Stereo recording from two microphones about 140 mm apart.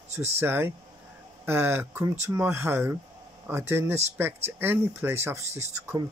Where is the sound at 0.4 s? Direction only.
15° right (ahead or behind).